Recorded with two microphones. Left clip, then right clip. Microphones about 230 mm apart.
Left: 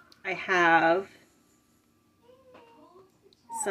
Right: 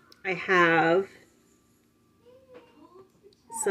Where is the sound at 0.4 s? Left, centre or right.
Left.